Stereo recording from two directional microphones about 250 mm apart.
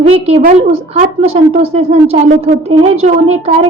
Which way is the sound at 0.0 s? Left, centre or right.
Right.